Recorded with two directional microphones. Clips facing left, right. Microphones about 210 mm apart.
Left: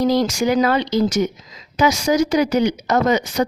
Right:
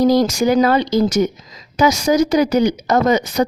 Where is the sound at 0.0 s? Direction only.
40° right (ahead or behind).